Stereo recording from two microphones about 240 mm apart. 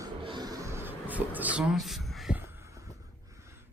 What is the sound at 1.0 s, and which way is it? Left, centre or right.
Speech, centre.